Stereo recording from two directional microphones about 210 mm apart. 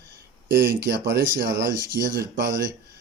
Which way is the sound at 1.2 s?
45° right (ahead or behind).